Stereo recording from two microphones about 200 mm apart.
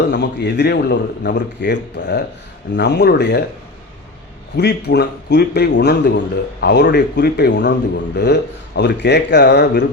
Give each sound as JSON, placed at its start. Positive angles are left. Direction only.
{"t": 0.1, "sound": "a man's voice", "side_deg": 60}
{"t": 4.5, "sound": "a man's voice", "side_deg": 55}